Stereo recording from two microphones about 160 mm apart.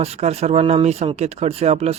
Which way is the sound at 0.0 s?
40° right (ahead or behind).